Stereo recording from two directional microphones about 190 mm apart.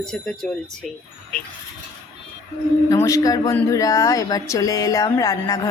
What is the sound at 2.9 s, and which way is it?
Speech, 15° left (ahead or behind).